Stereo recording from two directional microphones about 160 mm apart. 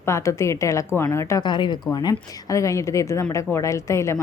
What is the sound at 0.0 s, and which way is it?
A woman's voice, 20° left (ahead or behind).